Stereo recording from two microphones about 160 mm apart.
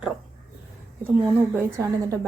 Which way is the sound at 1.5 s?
15° right (ahead or behind).